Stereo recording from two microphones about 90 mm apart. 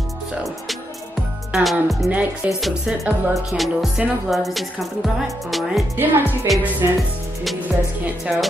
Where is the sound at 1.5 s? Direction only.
Centre (ahead or behind).